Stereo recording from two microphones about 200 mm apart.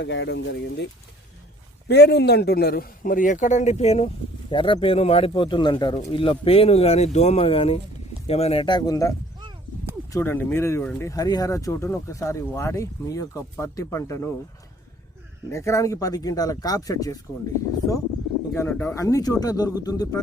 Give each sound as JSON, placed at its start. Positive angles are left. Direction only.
{"t": 0.0, "sound": "speech", "side_deg": 60}
{"t": 1.9, "sound": "a man's voice", "side_deg": 55}
{"t": 15.5, "sound": "speech", "side_deg": 15}
{"t": 18.5, "sound": "speech", "side_deg": 10}
{"t": 18.9, "sound": "speech", "side_deg": 15}